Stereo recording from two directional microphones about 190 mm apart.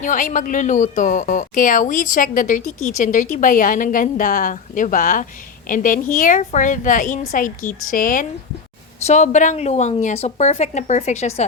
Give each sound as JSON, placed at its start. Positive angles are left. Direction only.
{"t": 0.0, "sound": "speech", "side_deg": 40}